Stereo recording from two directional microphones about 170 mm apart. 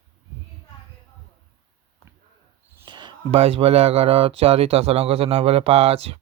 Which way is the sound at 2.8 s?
25° right (ahead or behind).